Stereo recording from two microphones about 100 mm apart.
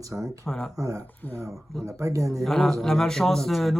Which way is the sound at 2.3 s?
Centre (ahead or behind).